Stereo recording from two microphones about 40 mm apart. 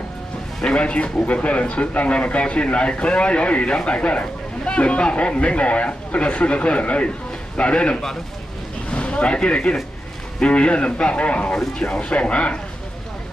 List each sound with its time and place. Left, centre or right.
0.7 s speech: left